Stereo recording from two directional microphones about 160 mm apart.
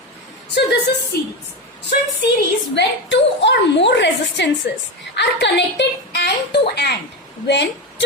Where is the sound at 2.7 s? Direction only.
90° left.